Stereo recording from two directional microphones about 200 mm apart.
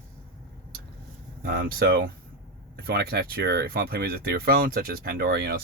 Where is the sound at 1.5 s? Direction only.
50° right (ahead or behind).